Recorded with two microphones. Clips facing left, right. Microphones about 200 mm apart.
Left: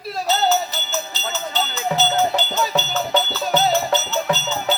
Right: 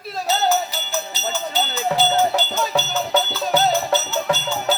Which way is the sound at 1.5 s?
10° right (ahead or behind).